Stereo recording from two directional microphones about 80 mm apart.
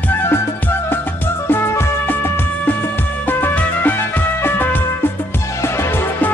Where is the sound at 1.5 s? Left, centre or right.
Left.